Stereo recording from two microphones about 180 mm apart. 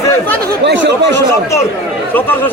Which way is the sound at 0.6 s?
85° right.